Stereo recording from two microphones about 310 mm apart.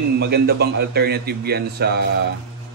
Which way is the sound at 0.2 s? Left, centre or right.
Right.